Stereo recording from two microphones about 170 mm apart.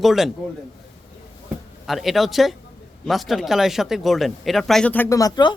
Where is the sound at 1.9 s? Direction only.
Centre (ahead or behind); by 5.5 s 25° left (ahead or behind).